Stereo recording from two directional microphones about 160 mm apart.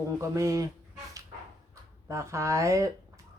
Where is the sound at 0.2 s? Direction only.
20° right (ahead or behind).